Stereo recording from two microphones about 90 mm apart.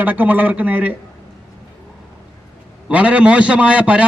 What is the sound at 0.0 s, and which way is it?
Speech, 20° right (ahead or behind).